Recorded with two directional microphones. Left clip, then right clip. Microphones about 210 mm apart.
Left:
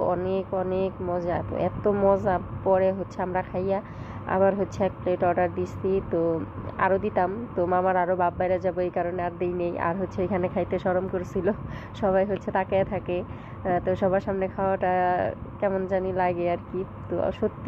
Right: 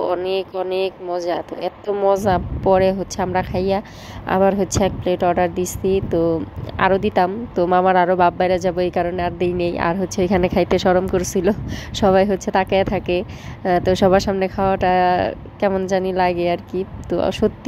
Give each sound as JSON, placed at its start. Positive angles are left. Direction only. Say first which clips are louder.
{"t": 0.0, "sound": "speech", "louder": "right 5 dB", "side_deg": -45}